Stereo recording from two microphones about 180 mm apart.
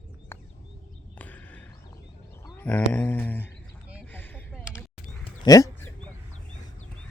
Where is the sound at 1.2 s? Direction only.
10° left (ahead or behind).